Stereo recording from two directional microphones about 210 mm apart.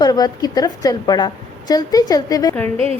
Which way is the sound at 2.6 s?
30° right (ahead or behind).